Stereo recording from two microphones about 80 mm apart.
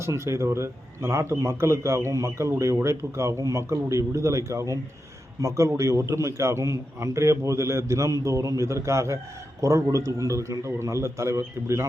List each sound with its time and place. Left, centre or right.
0.0 s a man's voice: right